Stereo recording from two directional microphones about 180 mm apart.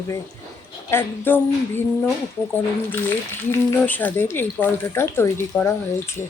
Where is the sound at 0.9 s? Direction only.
10° left (ahead or behind).